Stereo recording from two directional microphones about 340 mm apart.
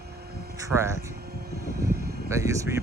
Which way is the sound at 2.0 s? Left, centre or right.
Right.